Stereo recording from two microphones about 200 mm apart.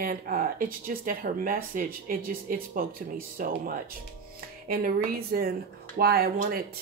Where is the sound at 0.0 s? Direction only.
45° right (ahead or behind).